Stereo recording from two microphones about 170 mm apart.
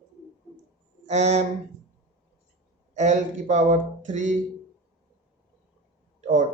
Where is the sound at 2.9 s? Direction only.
45° right (ahead or behind).